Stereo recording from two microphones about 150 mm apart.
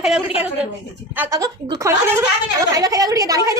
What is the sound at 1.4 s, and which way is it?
A woman's voice, 25° right (ahead or behind).